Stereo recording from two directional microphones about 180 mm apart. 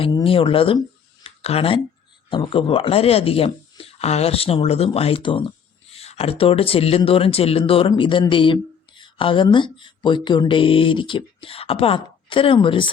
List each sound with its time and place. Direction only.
0.0 s speech: 30° left (ahead or behind)
1.2 s a sound: 35° left (ahead or behind)
2.3 s speech: 30° left (ahead or behind)